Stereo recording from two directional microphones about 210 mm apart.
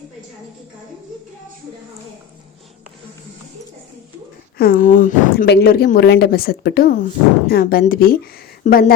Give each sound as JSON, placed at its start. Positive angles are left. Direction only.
{"t": 4.5, "sound": "speech", "side_deg": 45}